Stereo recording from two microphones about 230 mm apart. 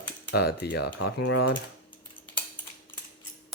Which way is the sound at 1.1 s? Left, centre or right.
Left.